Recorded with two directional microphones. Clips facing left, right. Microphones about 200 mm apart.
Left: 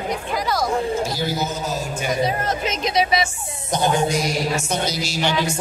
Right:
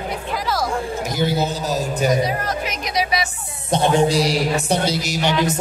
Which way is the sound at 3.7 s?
30° right (ahead or behind).